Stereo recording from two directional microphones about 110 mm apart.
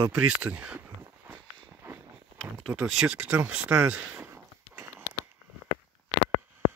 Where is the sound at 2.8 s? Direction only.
5° right (ahead or behind); by 5.0 s 20° right (ahead or behind).